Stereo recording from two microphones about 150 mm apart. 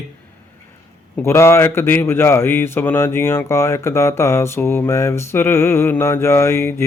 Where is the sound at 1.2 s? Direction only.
15° left (ahead or behind).